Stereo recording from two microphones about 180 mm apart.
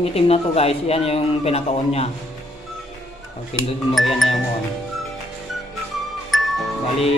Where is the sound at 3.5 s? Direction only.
35° left (ahead or behind).